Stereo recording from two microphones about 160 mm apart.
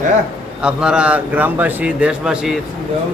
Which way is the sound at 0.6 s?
5° right (ahead or behind).